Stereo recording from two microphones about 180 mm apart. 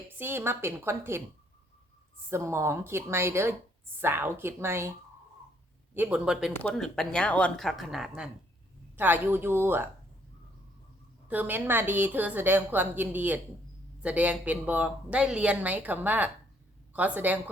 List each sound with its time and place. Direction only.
0.2 s speech: 10° right (ahead or behind)
2.3 s speech: 15° right (ahead or behind)
5.9 s speech: 10° right (ahead or behind)
11.3 s speech: 10° right (ahead or behind)